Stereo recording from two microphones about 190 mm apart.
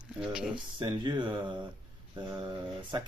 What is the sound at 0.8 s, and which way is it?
Speech, 25° right (ahead or behind).